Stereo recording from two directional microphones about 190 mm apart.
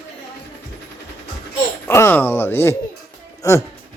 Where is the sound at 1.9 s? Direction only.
10° left (ahead or behind).